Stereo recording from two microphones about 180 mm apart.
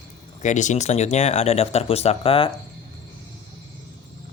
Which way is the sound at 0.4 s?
40° left (ahead or behind).